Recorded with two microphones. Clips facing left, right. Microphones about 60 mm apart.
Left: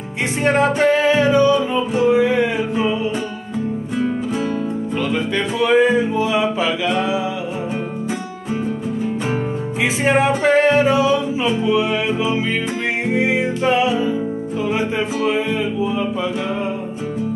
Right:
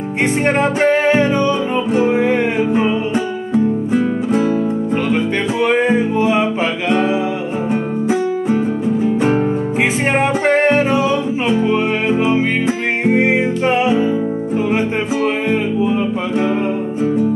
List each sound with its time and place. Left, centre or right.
0.8 s music: right
2.3 s music: right
4.9 s music: right
10.0 s music: right
10.8 s singing: right
11.5 s music: right
15.2 s music: right